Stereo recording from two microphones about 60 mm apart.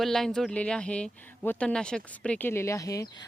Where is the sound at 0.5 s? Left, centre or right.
Centre.